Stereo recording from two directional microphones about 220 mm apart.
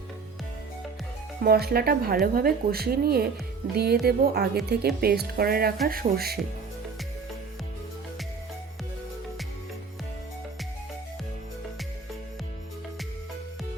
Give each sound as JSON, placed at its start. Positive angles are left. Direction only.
{"t": 1.4, "sound": "speech", "side_deg": -45}